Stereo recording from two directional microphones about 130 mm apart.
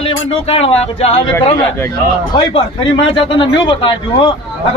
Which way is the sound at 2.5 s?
40° left (ahead or behind).